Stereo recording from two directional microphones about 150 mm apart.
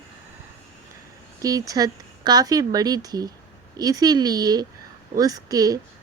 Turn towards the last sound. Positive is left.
turn(degrees=-25)  # may be behind; listen again after turning